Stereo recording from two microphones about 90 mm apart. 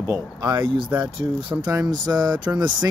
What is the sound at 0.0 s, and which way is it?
Speech, 40° right (ahead or behind).